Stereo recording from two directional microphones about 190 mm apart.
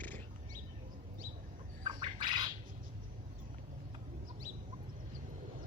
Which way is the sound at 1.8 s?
25° right (ahead or behind).